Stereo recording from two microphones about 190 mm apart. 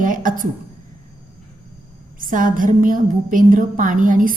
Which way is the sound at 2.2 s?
45° right (ahead or behind).